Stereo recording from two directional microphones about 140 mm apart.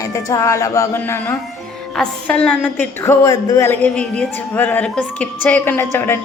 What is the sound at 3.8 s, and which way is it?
A woman's voice, 10° left (ahead or behind).